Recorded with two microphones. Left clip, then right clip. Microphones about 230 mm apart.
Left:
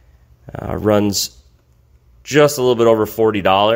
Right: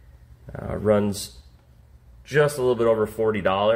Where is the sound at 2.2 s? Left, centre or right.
Left.